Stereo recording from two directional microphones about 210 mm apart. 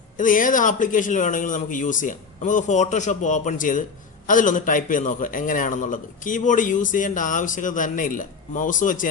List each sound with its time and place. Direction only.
0.2 s a man's voice: 40° left (ahead or behind)